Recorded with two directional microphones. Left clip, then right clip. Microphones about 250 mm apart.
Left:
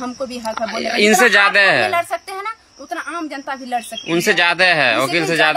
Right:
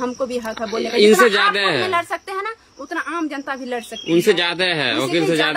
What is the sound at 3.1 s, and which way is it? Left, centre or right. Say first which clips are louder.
Speech: right 1 dB; right.